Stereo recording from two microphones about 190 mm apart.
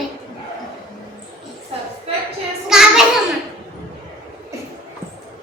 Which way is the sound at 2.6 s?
5° right (ahead or behind).